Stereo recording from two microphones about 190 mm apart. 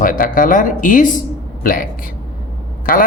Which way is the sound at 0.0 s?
45° left (ahead or behind).